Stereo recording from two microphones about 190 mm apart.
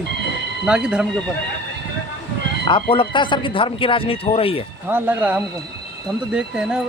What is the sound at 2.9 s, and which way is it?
Speech, 25° left (ahead or behind).